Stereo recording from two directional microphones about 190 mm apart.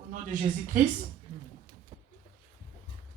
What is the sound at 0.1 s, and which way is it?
Speech, 45° right (ahead or behind).